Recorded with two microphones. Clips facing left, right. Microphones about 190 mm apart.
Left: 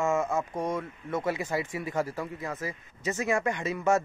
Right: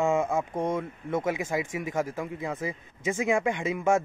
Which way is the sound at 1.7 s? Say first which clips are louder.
Right 1 dB; 90° right.